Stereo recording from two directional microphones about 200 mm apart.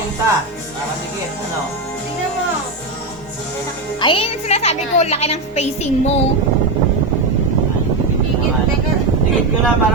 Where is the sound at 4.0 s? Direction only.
25° left (ahead or behind).